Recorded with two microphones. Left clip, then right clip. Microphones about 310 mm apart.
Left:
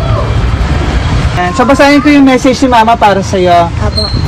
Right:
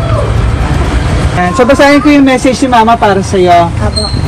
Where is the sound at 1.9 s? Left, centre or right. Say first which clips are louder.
Even; left.